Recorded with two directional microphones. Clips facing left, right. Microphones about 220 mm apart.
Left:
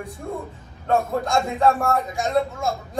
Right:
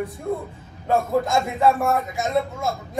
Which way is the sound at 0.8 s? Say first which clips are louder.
Right 1 dB; centre (ahead or behind).